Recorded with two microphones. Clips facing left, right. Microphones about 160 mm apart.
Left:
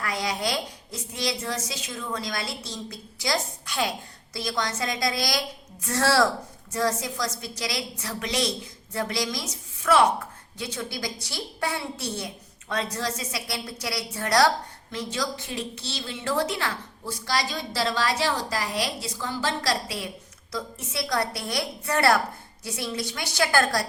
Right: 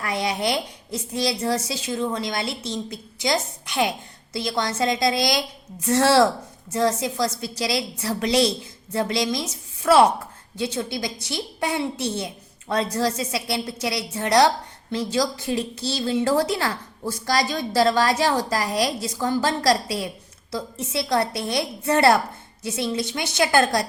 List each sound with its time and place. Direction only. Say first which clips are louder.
0.0 s a woman's voice: right 4 dB; 25° right (ahead or behind)
20.5 s a woman's voice: right 5 dB; 30° right (ahead or behind)